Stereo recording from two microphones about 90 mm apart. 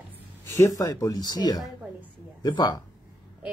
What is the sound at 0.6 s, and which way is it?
Speech, 40° left (ahead or behind).